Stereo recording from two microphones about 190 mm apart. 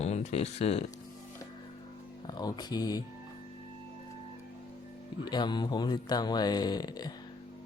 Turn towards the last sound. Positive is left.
turn(degrees=20)  # may be behind; listen again after turning